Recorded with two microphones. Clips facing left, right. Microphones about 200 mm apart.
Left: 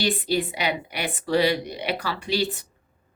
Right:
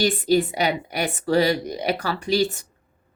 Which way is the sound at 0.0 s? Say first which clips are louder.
Right 5 dB; 45° right (ahead or behind).